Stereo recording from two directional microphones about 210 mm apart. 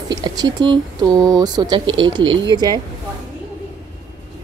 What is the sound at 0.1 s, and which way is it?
Speech, 20° right (ahead or behind).